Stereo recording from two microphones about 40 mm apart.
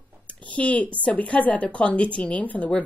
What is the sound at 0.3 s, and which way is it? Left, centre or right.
Speech, left.